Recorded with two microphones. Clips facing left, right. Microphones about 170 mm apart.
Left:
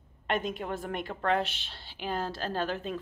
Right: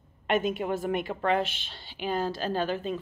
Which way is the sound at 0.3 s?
5° right (ahead or behind).